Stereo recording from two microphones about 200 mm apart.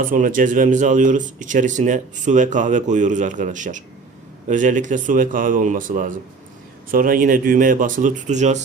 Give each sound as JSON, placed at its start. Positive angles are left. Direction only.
{"t": 0.0, "sound": "speech", "side_deg": -40}